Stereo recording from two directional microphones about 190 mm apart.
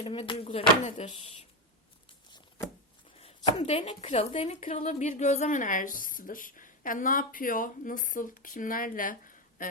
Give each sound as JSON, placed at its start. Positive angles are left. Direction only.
{"t": 0.0, "sound": "speech", "side_deg": 30}
{"t": 3.2, "sound": "speech", "side_deg": 30}